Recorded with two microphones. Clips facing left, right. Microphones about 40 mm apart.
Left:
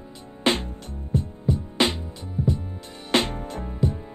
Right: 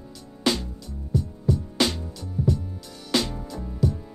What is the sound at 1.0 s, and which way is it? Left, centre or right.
Music, left.